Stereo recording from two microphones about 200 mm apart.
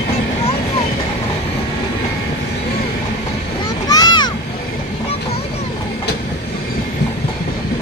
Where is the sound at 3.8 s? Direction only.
20° left (ahead or behind).